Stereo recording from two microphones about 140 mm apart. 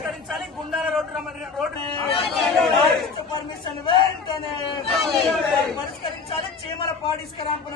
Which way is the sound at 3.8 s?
35° left (ahead or behind).